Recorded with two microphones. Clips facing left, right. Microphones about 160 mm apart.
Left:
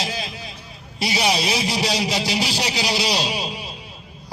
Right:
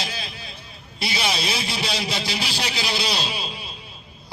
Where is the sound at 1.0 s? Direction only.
15° left (ahead or behind).